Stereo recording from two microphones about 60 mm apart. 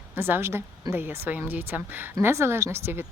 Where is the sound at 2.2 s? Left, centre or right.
Right.